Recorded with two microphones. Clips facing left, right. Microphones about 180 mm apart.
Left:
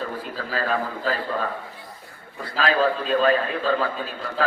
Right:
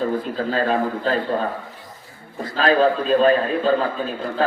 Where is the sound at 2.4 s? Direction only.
40° right (ahead or behind).